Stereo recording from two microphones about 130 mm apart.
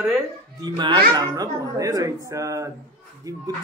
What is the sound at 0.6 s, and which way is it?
A man's voice, 35° right (ahead or behind).